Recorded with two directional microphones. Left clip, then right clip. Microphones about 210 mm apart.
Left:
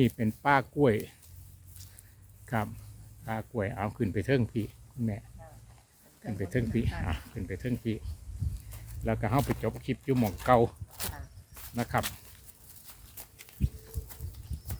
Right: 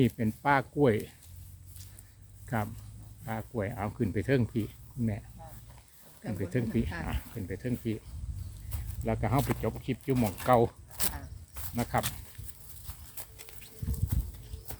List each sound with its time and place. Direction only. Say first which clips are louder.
0.0 s speech: left 1 dB; 20° left (ahead or behind)
3.2 s speech: left 2 dB; 20° left (ahead or behind)
6.4 s speech: left 1 dB; 15° left (ahead or behind)
9.0 s speech: left 1 dB; 20° left (ahead or behind)
10.9 s a sound: right 3 dB; 25° right (ahead or behind)
11.7 s speech: even; 15° left (ahead or behind)
13.6 s a sound: left 10 dB; 20° right (ahead or behind)